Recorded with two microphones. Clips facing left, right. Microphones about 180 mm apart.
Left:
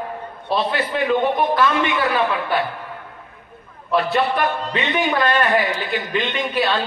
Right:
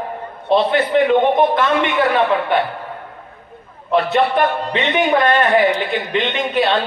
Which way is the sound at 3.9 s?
25° right (ahead or behind).